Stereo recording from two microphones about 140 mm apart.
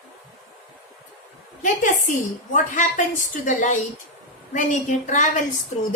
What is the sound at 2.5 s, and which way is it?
A woman's voice, 65° left (ahead or behind).